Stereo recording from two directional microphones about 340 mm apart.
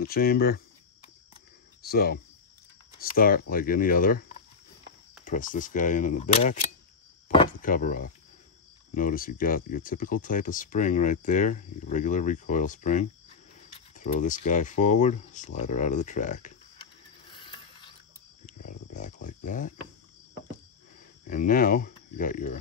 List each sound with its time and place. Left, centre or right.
0.0 s speech: left
1.8 s cricket: left
3.0 s speech: left
18.4 s a sound: left
21.3 s speech: left